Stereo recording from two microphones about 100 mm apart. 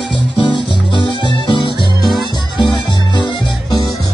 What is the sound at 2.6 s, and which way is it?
Music, 50° left (ahead or behind).